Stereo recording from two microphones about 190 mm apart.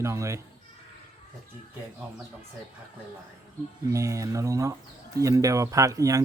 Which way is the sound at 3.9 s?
15° right (ahead or behind).